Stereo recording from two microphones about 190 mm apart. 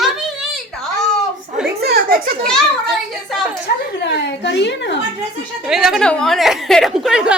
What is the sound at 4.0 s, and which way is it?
Speech, 65° left (ahead or behind).